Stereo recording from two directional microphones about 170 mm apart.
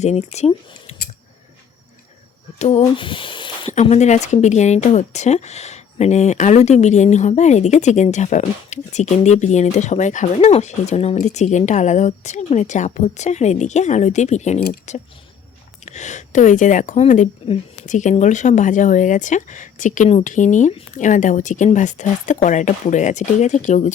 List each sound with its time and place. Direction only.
0.0 s speech: 40° left (ahead or behind)
2.6 s speech: 40° left (ahead or behind)
3.7 s a woman's voice: 40° left (ahead or behind)